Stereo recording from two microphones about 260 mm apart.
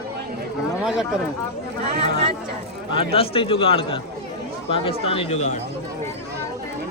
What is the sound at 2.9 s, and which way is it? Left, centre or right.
A man's voice, left.